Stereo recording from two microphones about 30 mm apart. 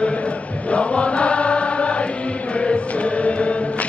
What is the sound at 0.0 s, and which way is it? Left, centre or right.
Chant, left.